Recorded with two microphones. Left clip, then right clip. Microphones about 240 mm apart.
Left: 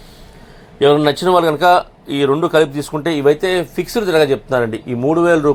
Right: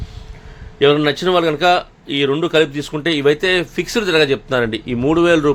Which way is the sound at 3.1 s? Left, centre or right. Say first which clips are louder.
Left 1 dB; centre.